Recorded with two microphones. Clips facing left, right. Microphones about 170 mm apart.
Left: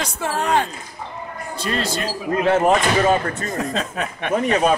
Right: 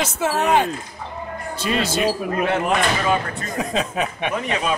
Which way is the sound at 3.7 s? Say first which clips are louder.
Right 2 dB; 10° right (ahead or behind).